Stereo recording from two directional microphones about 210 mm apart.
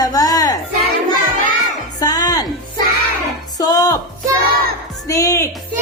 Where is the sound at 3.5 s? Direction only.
15° left (ahead or behind).